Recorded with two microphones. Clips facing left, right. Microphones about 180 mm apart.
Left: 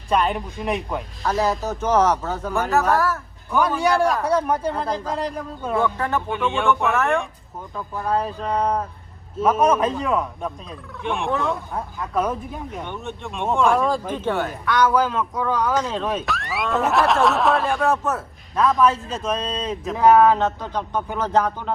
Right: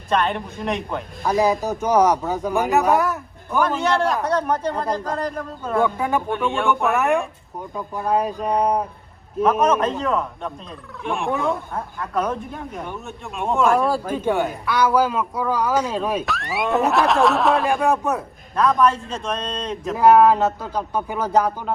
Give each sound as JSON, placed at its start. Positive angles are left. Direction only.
{"t": 0.1, "sound": "speech", "side_deg": 5}
{"t": 1.2, "sound": "speech", "side_deg": -10}
{"t": 3.9, "sound": "speech", "side_deg": 5}
{"t": 5.8, "sound": "speech", "side_deg": -15}
{"t": 6.2, "sound": "speech", "side_deg": 0}
{"t": 7.8, "sound": "speech", "side_deg": -15}
{"t": 9.4, "sound": "speech", "side_deg": 10}
{"t": 17.7, "sound": "speech", "side_deg": -15}
{"t": 18.5, "sound": "speech", "side_deg": 0}